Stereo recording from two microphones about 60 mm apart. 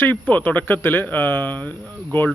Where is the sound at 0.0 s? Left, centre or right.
Left.